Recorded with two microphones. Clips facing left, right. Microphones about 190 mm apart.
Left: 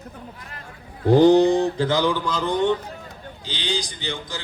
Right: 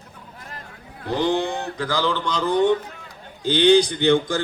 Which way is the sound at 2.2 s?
Centre (ahead or behind).